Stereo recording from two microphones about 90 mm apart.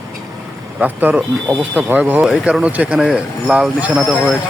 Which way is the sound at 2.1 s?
5° right (ahead or behind).